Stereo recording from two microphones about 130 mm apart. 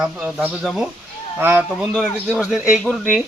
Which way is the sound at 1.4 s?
15° right (ahead or behind).